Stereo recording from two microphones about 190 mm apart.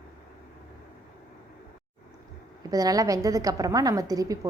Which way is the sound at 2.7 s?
20° right (ahead or behind).